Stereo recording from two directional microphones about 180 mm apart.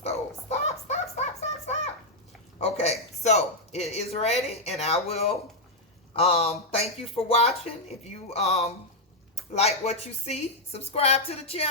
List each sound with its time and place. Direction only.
0.0 s music: 35° left (ahead or behind)
2.6 s a sound: 35° left (ahead or behind)
6.1 s speech: 35° left (ahead or behind)